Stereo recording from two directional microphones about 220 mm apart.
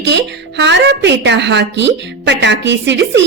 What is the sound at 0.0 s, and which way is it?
A woman's voice, 55° right (ahead or behind).